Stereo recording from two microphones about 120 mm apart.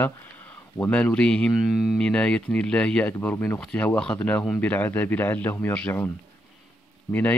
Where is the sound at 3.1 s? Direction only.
20° left (ahead or behind).